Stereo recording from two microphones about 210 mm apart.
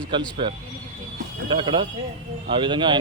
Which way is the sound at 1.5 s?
25° right (ahead or behind).